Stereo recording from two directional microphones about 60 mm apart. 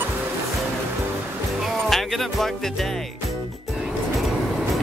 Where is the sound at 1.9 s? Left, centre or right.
Centre.